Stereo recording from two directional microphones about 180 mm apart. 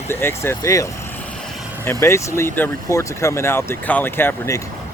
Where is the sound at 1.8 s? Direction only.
15° left (ahead or behind).